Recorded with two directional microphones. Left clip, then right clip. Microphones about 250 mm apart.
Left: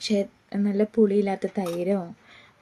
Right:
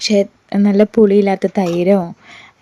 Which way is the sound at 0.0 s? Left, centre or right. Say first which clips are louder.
Right 12 dB; right.